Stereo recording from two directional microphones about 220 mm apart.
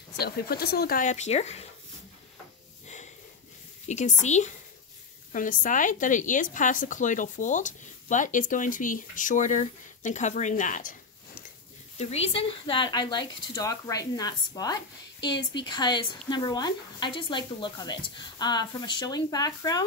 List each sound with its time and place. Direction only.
0.2 s a woman's voice: 45° left (ahead or behind)
3.8 s a woman's voice: 30° left (ahead or behind)
12.0 s speech: 30° left (ahead or behind)